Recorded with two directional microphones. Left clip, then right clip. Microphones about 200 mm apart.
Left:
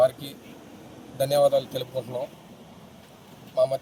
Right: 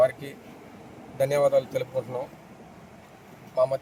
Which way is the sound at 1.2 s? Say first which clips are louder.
Left 1 dB; centre (ahead or behind).